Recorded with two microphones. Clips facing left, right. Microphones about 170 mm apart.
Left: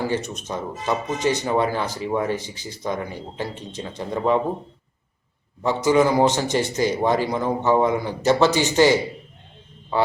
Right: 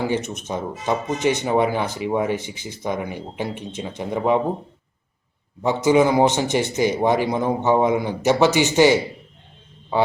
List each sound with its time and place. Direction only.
0.0 s a man's voice: 20° right (ahead or behind)
5.6 s a man's voice: 15° right (ahead or behind)